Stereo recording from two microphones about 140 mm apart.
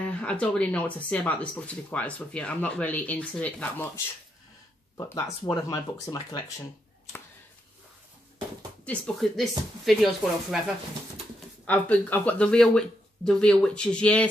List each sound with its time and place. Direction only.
0.0 s speech: 10° left (ahead or behind)
4.9 s speech: 25° left (ahead or behind)
8.8 s speech: 5° left (ahead or behind)
11.6 s speech: 10° left (ahead or behind)